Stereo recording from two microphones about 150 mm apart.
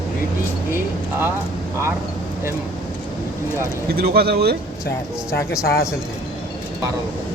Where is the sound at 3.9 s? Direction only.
90° right.